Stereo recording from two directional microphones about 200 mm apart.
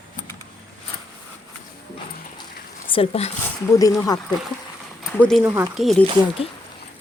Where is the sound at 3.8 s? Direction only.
15° left (ahead or behind).